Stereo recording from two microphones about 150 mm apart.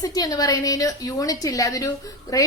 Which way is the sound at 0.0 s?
25° left (ahead or behind).